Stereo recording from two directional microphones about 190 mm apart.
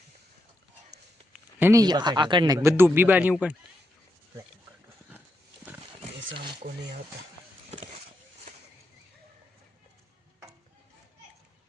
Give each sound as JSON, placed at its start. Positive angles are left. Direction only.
{"t": 1.3, "sound": "speech", "side_deg": -10}